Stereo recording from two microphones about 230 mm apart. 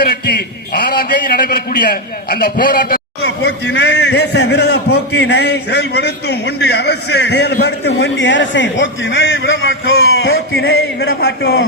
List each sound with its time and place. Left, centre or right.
0.0 s a man's voice: left